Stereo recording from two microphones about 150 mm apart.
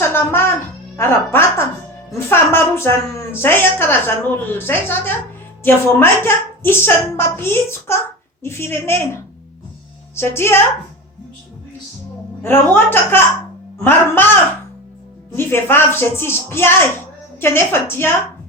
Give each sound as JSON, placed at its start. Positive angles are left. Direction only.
{"t": 0.0, "sound": "music", "side_deg": 15}
{"t": 0.9, "sound": "a woman's voice", "side_deg": 15}
{"t": 10.2, "sound": "a woman's voice", "side_deg": 15}
{"t": 12.7, "sound": "a woman's voice", "side_deg": 15}
{"t": 15.4, "sound": "a woman's voice", "side_deg": 15}